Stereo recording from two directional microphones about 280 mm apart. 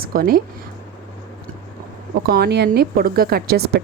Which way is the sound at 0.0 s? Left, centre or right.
Right.